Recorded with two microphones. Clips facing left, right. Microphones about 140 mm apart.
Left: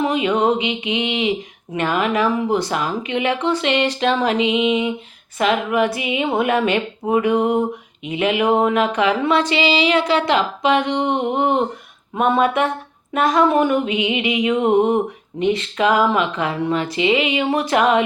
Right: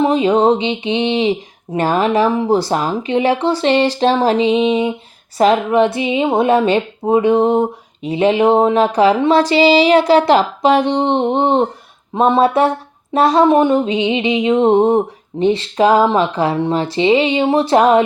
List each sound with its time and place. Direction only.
0.0 s speech: 35° right (ahead or behind)